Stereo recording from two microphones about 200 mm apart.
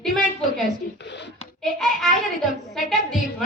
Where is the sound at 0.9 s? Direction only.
60° left (ahead or behind).